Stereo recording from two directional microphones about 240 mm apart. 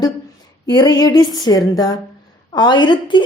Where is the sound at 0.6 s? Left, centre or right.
Centre.